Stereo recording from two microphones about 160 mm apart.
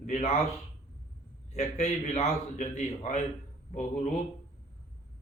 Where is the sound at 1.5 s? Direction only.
45° left (ahead or behind).